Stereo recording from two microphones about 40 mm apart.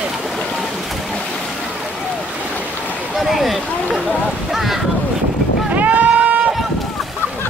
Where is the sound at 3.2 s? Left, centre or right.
Centre.